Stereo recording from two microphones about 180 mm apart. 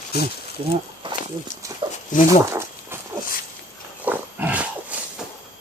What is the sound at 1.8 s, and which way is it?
Dog, 30° right (ahead or behind).